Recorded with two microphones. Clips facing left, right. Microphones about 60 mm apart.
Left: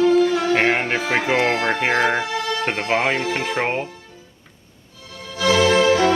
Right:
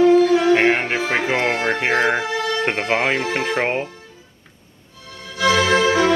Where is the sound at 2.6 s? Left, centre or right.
Centre.